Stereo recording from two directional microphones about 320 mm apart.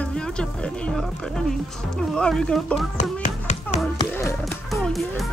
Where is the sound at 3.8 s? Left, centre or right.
Centre.